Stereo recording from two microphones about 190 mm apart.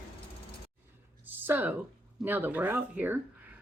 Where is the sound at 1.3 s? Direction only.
10° right (ahead or behind).